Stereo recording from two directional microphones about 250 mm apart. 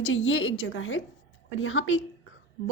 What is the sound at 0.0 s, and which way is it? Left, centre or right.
Speech, left.